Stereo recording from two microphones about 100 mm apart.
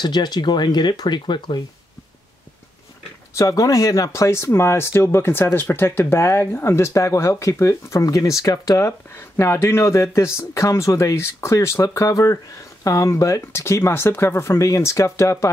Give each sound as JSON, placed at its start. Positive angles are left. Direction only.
{"t": 0.0, "sound": "speech", "side_deg": 45}
{"t": 3.3, "sound": "speech", "side_deg": 30}